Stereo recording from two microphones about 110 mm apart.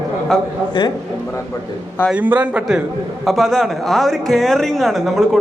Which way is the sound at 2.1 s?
15° right (ahead or behind).